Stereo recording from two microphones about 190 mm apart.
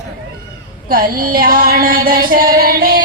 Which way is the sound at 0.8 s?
50° right (ahead or behind).